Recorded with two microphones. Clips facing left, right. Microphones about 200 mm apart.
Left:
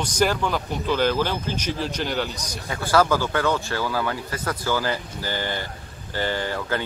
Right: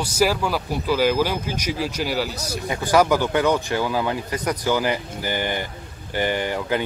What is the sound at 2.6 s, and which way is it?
A man's voice, 20° right (ahead or behind).